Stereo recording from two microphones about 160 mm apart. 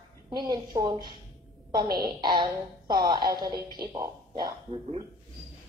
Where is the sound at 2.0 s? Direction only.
25° right (ahead or behind).